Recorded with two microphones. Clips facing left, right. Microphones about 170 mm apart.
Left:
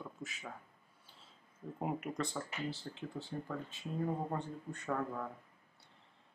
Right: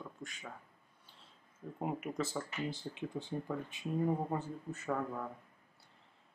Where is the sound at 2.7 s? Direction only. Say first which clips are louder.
Right 3 dB; 20° right (ahead or behind).